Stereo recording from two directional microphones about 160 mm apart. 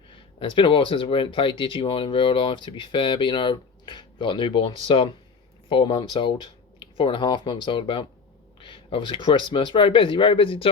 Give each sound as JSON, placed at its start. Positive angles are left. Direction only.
{"t": 0.3, "sound": "speech", "side_deg": 30}